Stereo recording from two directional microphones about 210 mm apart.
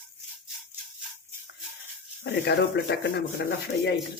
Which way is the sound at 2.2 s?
55° left (ahead or behind).